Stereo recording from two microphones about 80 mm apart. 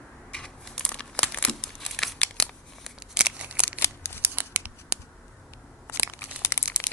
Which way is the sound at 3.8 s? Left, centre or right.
Left.